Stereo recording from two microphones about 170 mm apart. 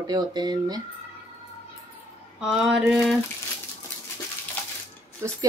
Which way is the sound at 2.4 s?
5° right (ahead or behind).